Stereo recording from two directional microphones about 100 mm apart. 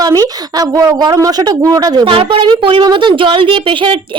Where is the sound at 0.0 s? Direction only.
40° right (ahead or behind).